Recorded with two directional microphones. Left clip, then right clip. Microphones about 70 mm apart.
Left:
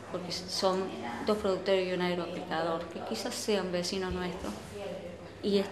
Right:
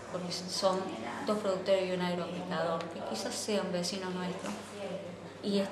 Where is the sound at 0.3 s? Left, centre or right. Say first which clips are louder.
Left 1 dB; right.